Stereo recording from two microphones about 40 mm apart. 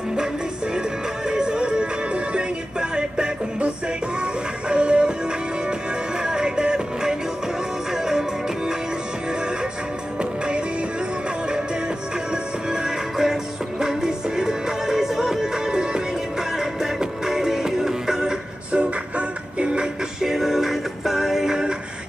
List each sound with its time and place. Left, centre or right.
0.7 s music: centre
12.6 s music: centre
18.7 s music: right
20.2 s music: centre